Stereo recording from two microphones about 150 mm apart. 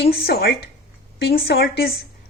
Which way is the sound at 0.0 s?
40° left (ahead or behind).